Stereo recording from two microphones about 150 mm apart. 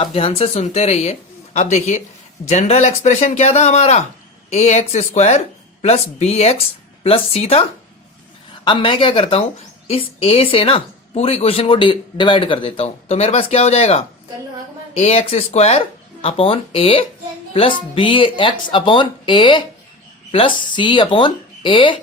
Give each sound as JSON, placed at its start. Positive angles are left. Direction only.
{"t": 0.0, "sound": "speech", "side_deg": 40}
{"t": 8.6, "sound": "a woman's voice", "side_deg": 35}
{"t": 20.7, "sound": "a woman's voice", "side_deg": 30}